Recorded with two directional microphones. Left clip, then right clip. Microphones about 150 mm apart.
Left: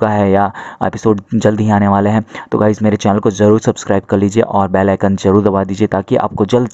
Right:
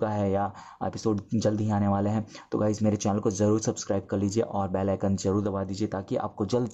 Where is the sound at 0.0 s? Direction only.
30° left (ahead or behind).